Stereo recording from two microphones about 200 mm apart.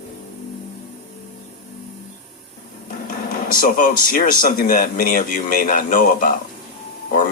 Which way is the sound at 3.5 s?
45° left (ahead or behind).